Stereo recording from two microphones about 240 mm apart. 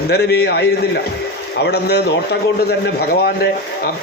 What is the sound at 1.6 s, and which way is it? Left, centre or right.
A man's voice, left.